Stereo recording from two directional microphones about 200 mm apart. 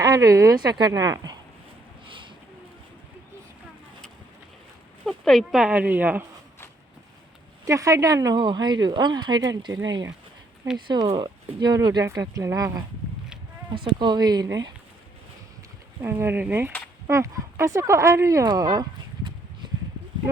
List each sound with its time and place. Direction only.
0.0 s a woman's voice: 15° right (ahead or behind)
2.0 s a sound: 25° right (ahead or behind)
5.0 s speech: centre (ahead or behind)
7.6 s speech: 15° right (ahead or behind)
16.0 s speech: 10° right (ahead or behind)